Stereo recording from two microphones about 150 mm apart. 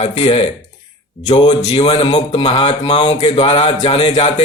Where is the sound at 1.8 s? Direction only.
35° left (ahead or behind).